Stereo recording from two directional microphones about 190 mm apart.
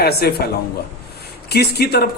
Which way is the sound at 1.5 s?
55° left (ahead or behind).